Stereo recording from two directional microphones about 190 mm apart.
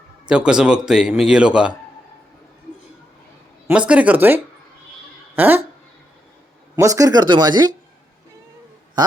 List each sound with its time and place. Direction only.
0.3 s a man's voice: 5° right (ahead or behind)
3.7 s speech: 5° right (ahead or behind)
5.4 s speech: 10° right (ahead or behind)
6.7 s speech: 15° right (ahead or behind)